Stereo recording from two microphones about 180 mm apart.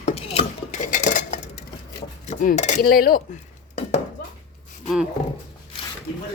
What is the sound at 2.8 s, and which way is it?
Speech, 55° left (ahead or behind).